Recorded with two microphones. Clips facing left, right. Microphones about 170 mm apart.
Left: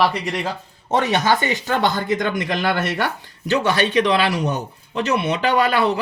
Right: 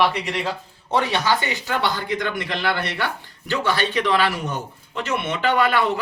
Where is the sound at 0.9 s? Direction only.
45° left (ahead or behind).